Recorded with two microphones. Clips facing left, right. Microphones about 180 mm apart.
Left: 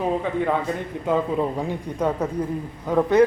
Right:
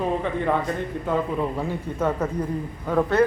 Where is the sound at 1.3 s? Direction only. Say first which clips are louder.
Left 2 dB; 15° left (ahead or behind).